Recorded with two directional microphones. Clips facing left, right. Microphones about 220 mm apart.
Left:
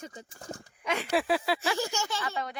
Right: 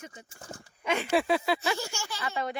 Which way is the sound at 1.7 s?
15° left (ahead or behind).